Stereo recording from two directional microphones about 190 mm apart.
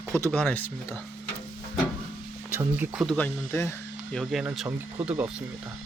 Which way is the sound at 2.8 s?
5° right (ahead or behind).